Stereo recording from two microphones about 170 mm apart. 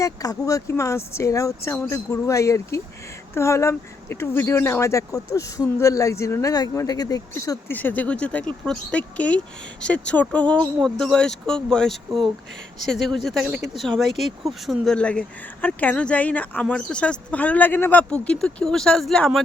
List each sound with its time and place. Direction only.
0.0 s speech: 20° left (ahead or behind); by 19.4 s 5° left (ahead or behind)